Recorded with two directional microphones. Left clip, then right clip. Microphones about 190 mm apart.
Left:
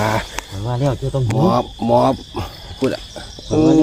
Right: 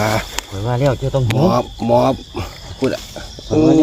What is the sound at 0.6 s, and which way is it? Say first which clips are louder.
Speech: right 4 dB; 35° right (ahead or behind).